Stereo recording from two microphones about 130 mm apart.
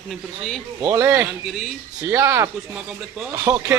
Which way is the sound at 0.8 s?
15° right (ahead or behind).